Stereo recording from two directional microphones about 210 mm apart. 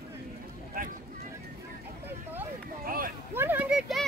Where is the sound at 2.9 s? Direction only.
45° right (ahead or behind).